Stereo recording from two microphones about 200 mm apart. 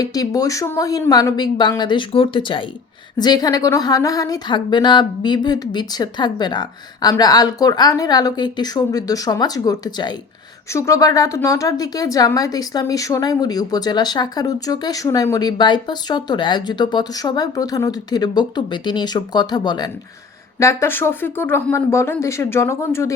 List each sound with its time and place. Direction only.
0.0 s a woman's voice: 20° left (ahead or behind)